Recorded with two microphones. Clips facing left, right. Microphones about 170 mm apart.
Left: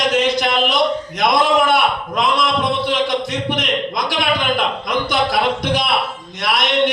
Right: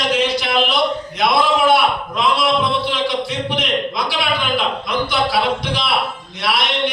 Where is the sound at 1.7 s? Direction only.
45° left (ahead or behind).